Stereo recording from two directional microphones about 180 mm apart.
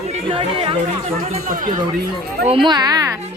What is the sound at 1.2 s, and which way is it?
Speech, 40° right (ahead or behind).